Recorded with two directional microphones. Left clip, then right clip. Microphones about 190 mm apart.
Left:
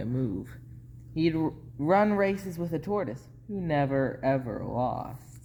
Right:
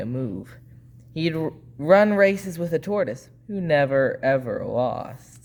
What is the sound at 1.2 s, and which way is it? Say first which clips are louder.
Speech: right 2 dB; 40° right (ahead or behind).